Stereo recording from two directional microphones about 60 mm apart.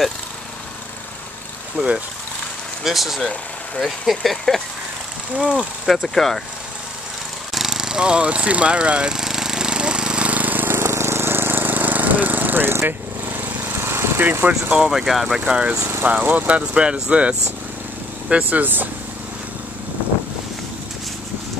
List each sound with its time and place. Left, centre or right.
2.8 s speech: centre
3.3 s speech: centre
5.3 s speech: centre
6.0 s speech: centre
7.5 s lawn mower: centre; by 14.2 s right
14.4 s speech: right
14.9 s speech: centre
16.0 s speech: right